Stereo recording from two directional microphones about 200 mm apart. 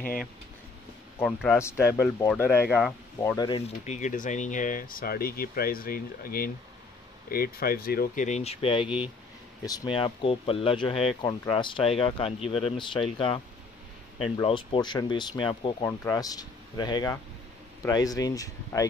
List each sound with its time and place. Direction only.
1.2 s speech: 5° left (ahead or behind); by 8.8 s 30° left (ahead or behind)
8.8 s speech: 5° right (ahead or behind)
9.9 s speech: 25° left (ahead or behind)
14.3 s speech: 25° left (ahead or behind)